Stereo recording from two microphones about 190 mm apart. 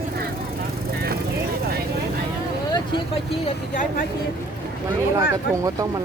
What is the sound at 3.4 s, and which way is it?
Speech, 45° left (ahead or behind).